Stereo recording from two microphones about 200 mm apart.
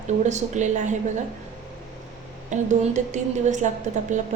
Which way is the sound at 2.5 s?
35° right (ahead or behind).